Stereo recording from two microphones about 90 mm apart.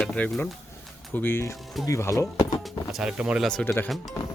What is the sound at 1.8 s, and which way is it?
Speech, 35° left (ahead or behind).